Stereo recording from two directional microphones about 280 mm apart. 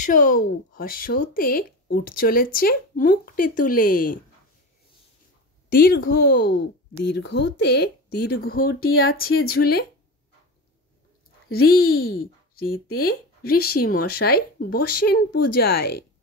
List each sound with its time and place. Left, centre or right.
0.0 s speech: left
5.7 s speech: left
6.3 s speech: left
7.2 s speech: left
12.0 s speech: left